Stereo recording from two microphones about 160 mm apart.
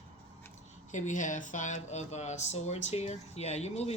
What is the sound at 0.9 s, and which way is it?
A woman's voice, 50° left (ahead or behind).